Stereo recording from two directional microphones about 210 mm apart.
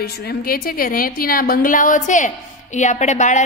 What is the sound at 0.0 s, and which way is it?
A woman's voice, 50° left (ahead or behind).